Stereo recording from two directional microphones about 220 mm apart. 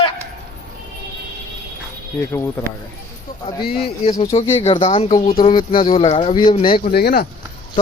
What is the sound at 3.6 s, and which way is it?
Speech, 45° left (ahead or behind).